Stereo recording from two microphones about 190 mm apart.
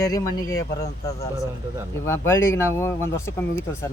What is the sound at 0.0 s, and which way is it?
Speech, 20° left (ahead or behind).